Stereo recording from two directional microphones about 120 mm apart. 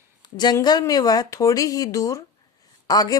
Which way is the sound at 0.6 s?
30° left (ahead or behind).